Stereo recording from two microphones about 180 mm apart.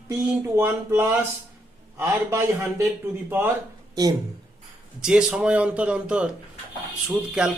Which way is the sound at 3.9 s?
20° right (ahead or behind).